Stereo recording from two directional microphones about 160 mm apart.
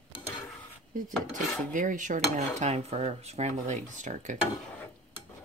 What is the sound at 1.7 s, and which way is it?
Cutlery, 55° right (ahead or behind).